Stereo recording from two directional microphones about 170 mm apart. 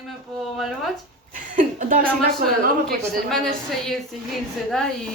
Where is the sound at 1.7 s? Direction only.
50° right (ahead or behind).